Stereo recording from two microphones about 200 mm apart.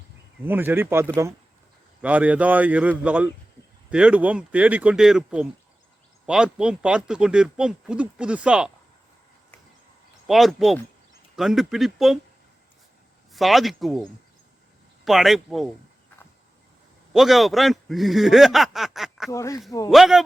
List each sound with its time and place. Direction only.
0.4 s speech: 10° right (ahead or behind)
10.2 s speech: centre (ahead or behind)
13.3 s speech: centre (ahead or behind)
17.1 s speech: centre (ahead or behind)
19.3 s speech: 15° left (ahead or behind)
19.9 s speech: centre (ahead or behind)